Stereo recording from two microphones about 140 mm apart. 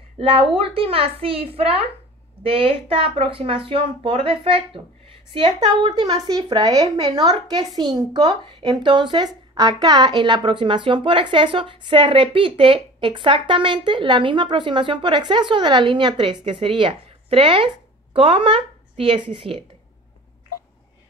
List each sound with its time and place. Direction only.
0.2 s a woman's voice: 40° right (ahead or behind)